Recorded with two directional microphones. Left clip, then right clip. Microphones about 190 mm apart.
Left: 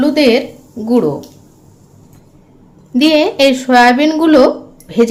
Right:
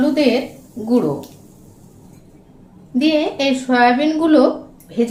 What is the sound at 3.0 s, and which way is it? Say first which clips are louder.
Speech: left 7 dB; 50° left (ahead or behind).